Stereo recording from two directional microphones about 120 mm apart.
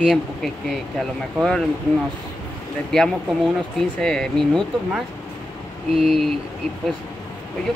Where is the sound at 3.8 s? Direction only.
5° left (ahead or behind).